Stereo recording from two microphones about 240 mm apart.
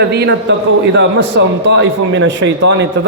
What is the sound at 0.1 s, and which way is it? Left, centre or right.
Speech, right.